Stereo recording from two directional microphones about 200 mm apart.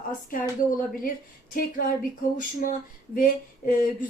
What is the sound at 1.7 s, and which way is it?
Speech, 45° left (ahead or behind).